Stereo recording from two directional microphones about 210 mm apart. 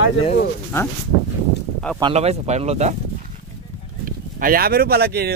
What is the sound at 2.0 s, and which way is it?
Speech, 30° right (ahead or behind).